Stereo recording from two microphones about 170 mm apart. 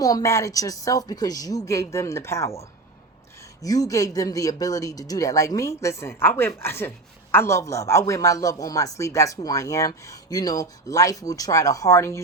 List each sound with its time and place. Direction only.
0.0 s a woman's voice: 20° left (ahead or behind)